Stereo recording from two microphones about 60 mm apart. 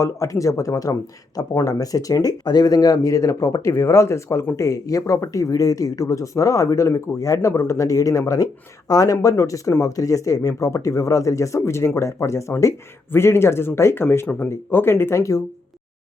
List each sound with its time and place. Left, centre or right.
0.0 s speech: left
1.4 s speech: left
4.5 s speech: left
9.3 s speech: left
9.8 s speech: left
13.1 s speech: left
15.2 s speech: left